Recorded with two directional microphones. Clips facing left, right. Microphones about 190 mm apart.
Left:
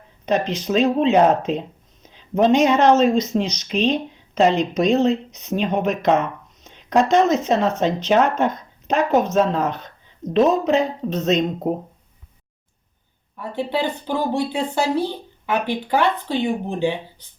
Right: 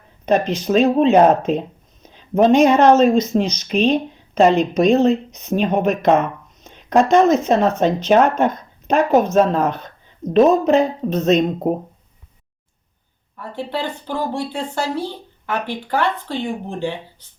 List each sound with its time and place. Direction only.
0.3 s speech: 50° right (ahead or behind)
13.3 s speech: centre (ahead or behind)